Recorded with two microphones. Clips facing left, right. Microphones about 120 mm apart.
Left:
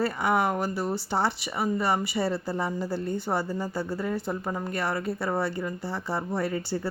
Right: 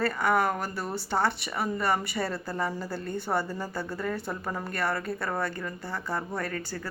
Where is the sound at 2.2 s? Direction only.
25° left (ahead or behind).